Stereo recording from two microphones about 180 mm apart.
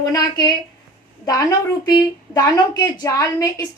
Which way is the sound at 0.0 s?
20° left (ahead or behind).